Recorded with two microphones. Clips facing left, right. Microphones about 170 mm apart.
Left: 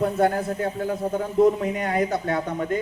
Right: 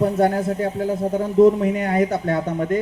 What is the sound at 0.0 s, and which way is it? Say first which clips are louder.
Speech: right 3 dB; 40° right (ahead or behind).